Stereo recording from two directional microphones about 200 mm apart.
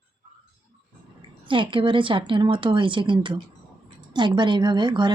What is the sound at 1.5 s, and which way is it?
A woman's voice, 25° right (ahead or behind).